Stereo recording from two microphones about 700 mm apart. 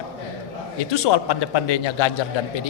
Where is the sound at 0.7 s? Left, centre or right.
Left.